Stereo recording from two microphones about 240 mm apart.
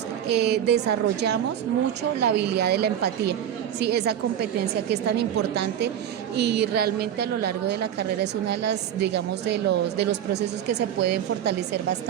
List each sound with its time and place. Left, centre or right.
0.3 s a woman's voice: right